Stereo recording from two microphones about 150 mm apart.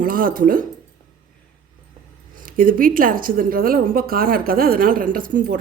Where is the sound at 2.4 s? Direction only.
70° right (ahead or behind).